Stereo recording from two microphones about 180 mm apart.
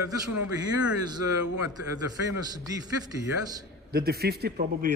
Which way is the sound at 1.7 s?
20° right (ahead or behind).